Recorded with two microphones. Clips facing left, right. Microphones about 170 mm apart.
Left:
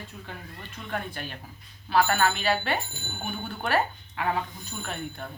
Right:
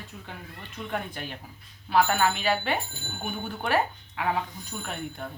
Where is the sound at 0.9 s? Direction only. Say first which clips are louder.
Even; 15° right (ahead or behind).